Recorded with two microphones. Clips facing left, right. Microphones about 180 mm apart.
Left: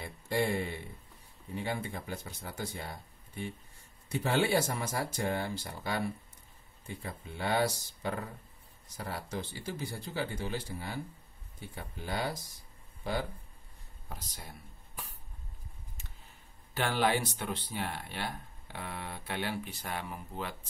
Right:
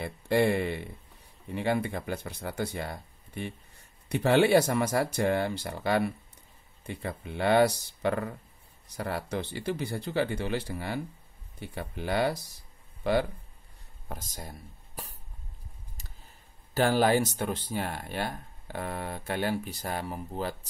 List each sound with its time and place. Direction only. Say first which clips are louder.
0.0 s speech: right 7 dB; 70° right (ahead or behind)
14.0 s speech: right 6 dB; 45° right (ahead or behind)
16.0 s a sound: right 2 dB; 40° right (ahead or behind)
16.7 s speech: right 6 dB; 40° right (ahead or behind)